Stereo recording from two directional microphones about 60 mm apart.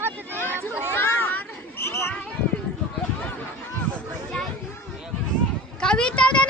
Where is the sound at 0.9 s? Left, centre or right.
Left.